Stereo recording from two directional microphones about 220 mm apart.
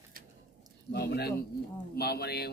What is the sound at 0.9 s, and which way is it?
Speech, 45° left (ahead or behind).